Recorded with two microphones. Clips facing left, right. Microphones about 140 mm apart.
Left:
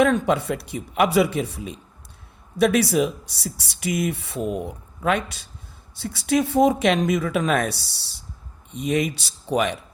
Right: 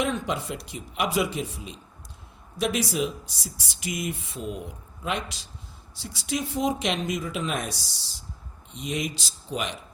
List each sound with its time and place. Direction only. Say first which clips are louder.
0.0 s speech: left 8 dB; 60° left (ahead or behind)